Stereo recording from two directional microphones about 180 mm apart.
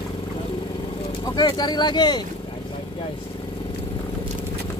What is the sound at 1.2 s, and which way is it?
Speech, 20° left (ahead or behind).